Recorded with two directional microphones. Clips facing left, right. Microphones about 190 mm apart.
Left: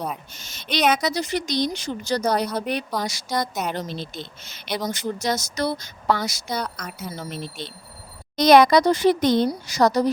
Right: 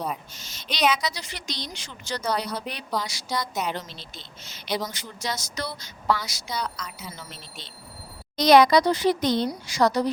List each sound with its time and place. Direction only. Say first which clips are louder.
0.3 s a woman's voice: left 5 dB; 55° left (ahead or behind)
4.9 s speech: left 8 dB; 45° left (ahead or behind)
9.5 s a woman's voice: left 3 dB; 40° left (ahead or behind)